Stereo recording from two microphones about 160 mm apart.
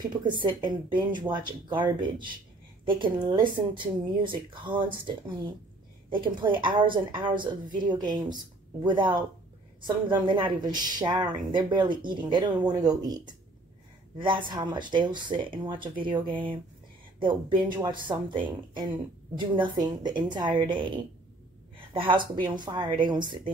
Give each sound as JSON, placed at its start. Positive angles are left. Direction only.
{"t": 0.0, "sound": "a woman's voice", "side_deg": -30}